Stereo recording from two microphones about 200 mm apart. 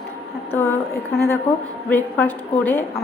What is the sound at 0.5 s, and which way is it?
A woman's voice, 10° left (ahead or behind).